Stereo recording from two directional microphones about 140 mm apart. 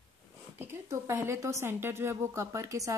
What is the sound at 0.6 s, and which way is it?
Speech, 20° right (ahead or behind).